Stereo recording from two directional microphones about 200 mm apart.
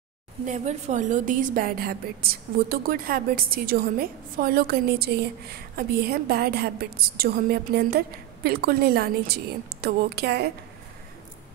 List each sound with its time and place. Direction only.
0.5 s a woman's voice: 35° right (ahead or behind); by 10.5 s 55° right (ahead or behind)